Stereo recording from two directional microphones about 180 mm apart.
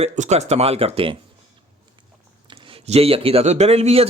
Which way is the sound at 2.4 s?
30° right (ahead or behind).